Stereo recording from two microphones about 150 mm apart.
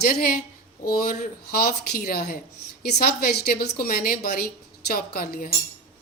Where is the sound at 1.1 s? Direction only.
80° left.